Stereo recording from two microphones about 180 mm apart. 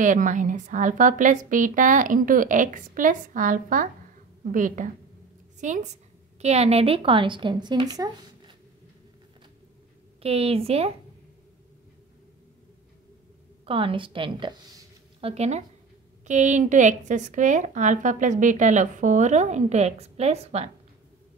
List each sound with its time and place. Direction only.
0.0 s a woman's voice: 45° right (ahead or behind); by 8.5 s 20° right (ahead or behind)
10.2 s a woman's voice: 35° right (ahead or behind)
13.7 s a woman's voice: 30° right (ahead or behind)